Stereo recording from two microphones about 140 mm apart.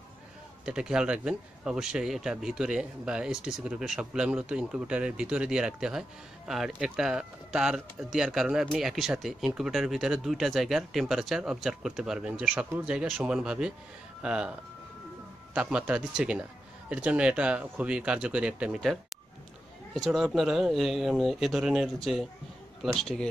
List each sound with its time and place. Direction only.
0.7 s speech: 5° right (ahead or behind)
15.5 s speech: 5° right (ahead or behind)